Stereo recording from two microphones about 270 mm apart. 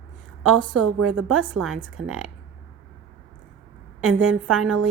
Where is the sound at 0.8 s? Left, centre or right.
Right.